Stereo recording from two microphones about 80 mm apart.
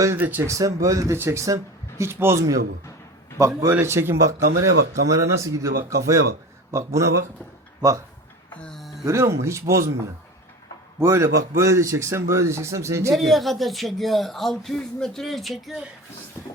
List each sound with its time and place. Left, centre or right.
0.2 s speech: right
0.4 s speech: right
3.7 s speech: right
8.7 s a sound: centre
9.0 s speech: right
11.0 s speech: right
13.1 s speech: centre